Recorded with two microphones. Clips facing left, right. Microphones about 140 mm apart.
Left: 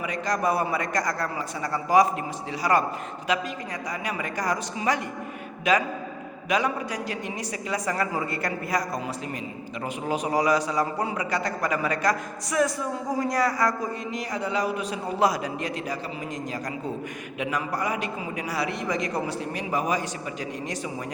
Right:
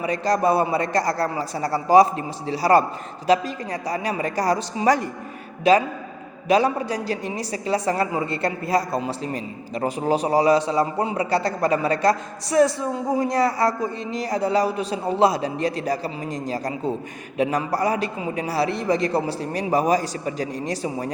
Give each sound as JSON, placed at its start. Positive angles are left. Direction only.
{"t": 0.0, "sound": "a woman's voice", "side_deg": -30}